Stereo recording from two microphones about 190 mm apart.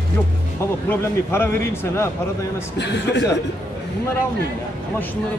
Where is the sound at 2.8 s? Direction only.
65° left (ahead or behind).